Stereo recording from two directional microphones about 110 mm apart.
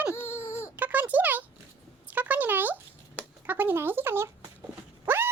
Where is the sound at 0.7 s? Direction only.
15° right (ahead or behind).